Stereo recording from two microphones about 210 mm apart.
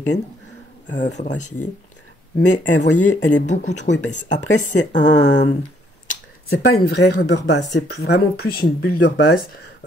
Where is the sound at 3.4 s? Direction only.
35° left (ahead or behind).